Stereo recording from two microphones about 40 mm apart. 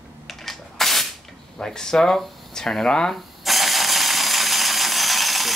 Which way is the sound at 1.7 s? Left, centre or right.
Centre.